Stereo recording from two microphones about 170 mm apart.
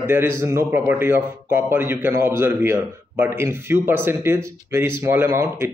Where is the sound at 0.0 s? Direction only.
15° right (ahead or behind).